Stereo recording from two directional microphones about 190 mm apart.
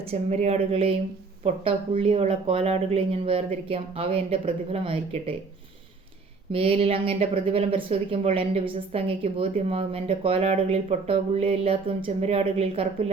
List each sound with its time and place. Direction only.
0.1 s speech: 35° right (ahead or behind)
6.5 s speech: 30° right (ahead or behind)